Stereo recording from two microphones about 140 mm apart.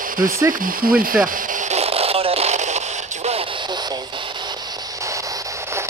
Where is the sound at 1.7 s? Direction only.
45° right (ahead or behind).